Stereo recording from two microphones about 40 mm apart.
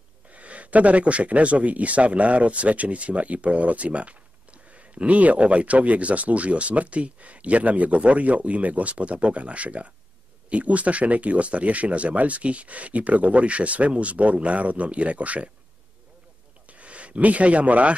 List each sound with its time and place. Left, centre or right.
0.3 s speech: right
16.7 s speech: right